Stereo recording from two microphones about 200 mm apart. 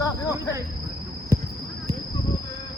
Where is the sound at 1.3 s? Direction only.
10° right (ahead or behind).